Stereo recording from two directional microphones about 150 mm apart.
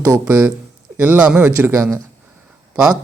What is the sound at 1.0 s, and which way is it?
Speech, 10° right (ahead or behind).